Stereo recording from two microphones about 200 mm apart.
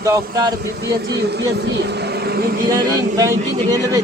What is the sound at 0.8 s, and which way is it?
Speech, 55° right (ahead or behind).